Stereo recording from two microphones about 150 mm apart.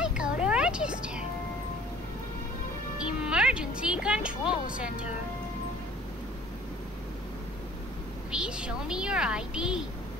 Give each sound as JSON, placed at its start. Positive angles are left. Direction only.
{"t": 0.0, "sound": "a sound", "side_deg": -5}
{"t": 3.1, "sound": "speech", "side_deg": -5}
{"t": 8.3, "sound": "speech", "side_deg": -5}